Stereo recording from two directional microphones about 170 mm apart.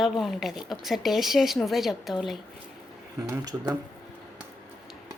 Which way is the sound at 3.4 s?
20° right (ahead or behind).